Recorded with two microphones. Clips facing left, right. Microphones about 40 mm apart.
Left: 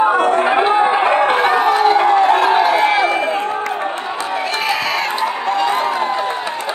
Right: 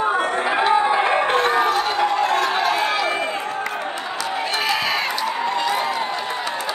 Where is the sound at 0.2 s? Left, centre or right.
Left.